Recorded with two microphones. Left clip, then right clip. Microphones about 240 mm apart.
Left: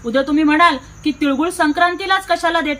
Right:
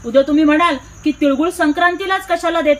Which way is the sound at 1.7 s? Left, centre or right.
Centre.